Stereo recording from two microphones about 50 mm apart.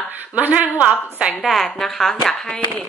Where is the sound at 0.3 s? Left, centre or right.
Right.